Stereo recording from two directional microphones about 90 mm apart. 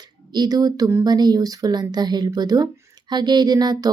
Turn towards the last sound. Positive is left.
turn(degrees=-50)  # may be behind; listen again after turning